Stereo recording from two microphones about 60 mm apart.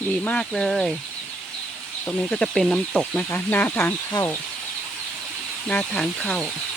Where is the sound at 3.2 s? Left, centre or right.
Left.